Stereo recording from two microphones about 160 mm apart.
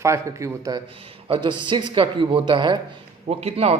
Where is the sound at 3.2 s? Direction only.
40° right (ahead or behind).